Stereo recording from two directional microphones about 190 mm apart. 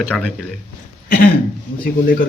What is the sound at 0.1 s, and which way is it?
Speech, 5° left (ahead or behind).